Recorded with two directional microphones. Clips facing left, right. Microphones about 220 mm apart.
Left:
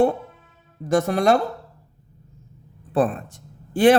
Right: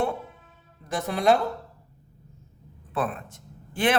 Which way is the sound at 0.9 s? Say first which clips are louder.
Left 4 dB; 45° left (ahead or behind).